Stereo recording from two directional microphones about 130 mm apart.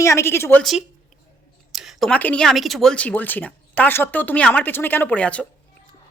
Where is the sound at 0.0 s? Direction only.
20° left (ahead or behind).